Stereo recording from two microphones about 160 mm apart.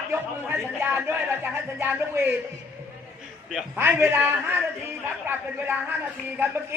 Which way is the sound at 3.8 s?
15° right (ahead or behind).